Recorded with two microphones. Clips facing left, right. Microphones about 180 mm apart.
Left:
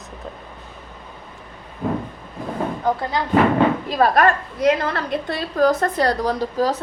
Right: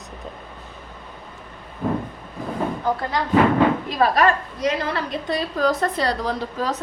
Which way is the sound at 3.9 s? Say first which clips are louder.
Left 3 dB; 50° left (ahead or behind).